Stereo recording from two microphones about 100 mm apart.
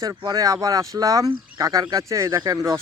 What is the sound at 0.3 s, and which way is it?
Speech, 35° right (ahead or behind).